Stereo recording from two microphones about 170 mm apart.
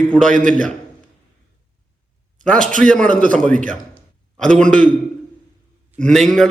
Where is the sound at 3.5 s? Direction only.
50° right (ahead or behind).